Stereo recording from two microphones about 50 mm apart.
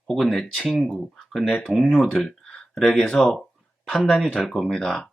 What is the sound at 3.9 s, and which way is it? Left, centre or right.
Speech, centre.